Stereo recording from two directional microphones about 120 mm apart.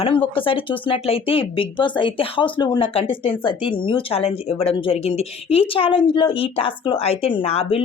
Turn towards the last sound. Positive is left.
turn(degrees=55)  # may be behind; listen again after turning